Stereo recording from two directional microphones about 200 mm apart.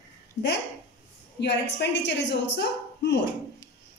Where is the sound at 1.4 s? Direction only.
60° left (ahead or behind).